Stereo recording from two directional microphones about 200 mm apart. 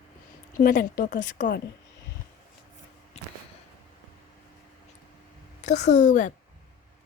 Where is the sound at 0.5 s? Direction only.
45° left (ahead or behind).